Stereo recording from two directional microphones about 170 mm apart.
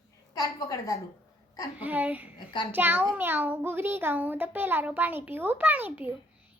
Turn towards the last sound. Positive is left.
turn(degrees=-10)  # may be behind; listen again after turning